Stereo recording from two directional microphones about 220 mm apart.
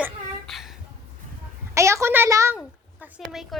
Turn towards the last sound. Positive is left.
turn(degrees=0)  # may be behind; listen again after turning